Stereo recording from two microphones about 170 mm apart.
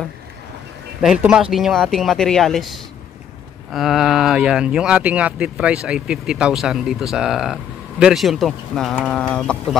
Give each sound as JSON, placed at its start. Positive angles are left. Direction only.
{"t": 1.0, "sound": "speech", "side_deg": -5}